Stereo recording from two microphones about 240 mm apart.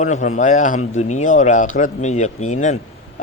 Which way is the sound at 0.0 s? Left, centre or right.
Left.